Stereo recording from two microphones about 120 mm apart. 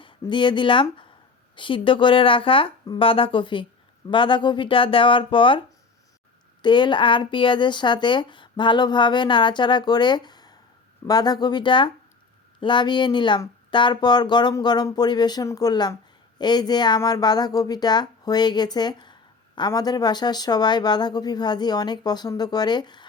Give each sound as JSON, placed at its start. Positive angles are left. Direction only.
{"t": 0.0, "sound": "speech", "side_deg": 40}
{"t": 6.6, "sound": "speech", "side_deg": 40}